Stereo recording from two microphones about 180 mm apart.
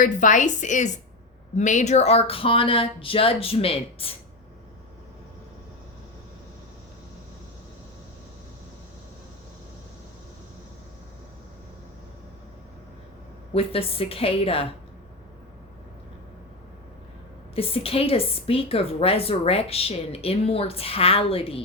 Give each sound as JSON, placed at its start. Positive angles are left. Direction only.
{"t": 0.0, "sound": "a woman's voice", "side_deg": 45}
{"t": 13.5, "sound": "a woman's voice", "side_deg": 30}
{"t": 17.5, "sound": "a woman's voice", "side_deg": 30}